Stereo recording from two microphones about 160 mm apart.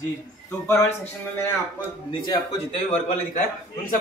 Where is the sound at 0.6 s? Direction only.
15° left (ahead or behind).